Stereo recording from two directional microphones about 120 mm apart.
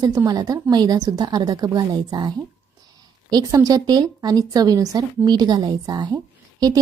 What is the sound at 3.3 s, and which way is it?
A woman's voice, 30° right (ahead or behind).